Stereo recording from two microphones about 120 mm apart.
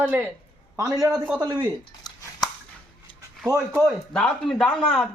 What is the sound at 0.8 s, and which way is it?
Speech, 30° right (ahead or behind).